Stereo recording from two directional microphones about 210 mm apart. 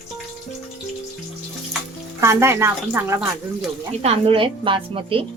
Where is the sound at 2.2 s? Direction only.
10° right (ahead or behind).